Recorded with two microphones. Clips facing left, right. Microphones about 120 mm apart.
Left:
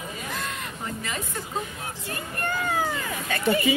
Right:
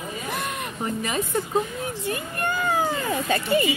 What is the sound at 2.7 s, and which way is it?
Cat, 30° right (ahead or behind).